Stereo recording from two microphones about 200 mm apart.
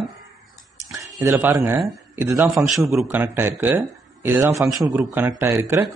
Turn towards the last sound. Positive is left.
turn(degrees=-10)  # may be behind; listen again after turning